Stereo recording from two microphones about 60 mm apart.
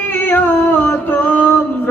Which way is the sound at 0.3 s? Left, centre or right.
Left.